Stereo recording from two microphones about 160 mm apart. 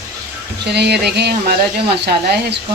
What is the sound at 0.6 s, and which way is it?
Speech, 90° right.